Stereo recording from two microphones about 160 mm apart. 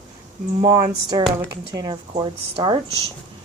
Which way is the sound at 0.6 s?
20° right (ahead or behind).